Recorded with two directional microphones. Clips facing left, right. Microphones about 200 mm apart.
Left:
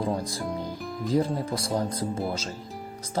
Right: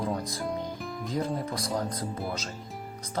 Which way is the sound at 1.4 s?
30° left (ahead or behind).